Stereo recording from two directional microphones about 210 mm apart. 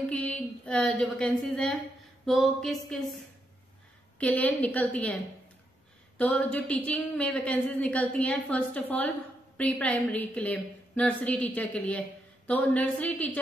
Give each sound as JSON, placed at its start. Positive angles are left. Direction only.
{"t": 0.1, "sound": "speech", "side_deg": 5}
{"t": 4.2, "sound": "a woman's voice", "side_deg": 5}
{"t": 6.1, "sound": "a woman's voice", "side_deg": 5}